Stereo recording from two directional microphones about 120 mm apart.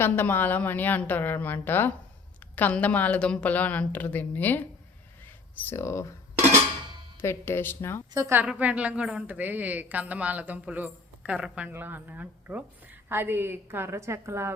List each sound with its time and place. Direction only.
0.0 s a woman's voice: 15° left (ahead or behind)
7.2 s speech: 20° left (ahead or behind)
8.1 s a woman's voice: 25° right (ahead or behind)
8.4 s a woman's voice: 10° right (ahead or behind)